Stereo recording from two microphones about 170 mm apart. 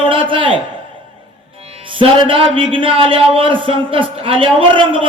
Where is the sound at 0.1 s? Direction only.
30° right (ahead or behind).